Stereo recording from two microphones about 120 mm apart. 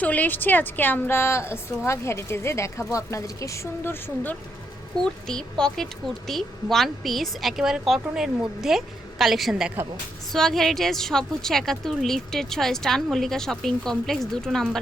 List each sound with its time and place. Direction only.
0.0 s a woman's voice: 15° left (ahead or behind)
5.3 s a woman's voice: 5° left (ahead or behind)